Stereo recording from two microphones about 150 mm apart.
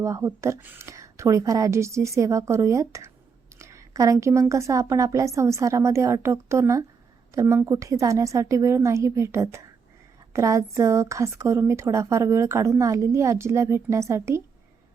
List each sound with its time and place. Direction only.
0.0 s a woman's voice: 20° right (ahead or behind)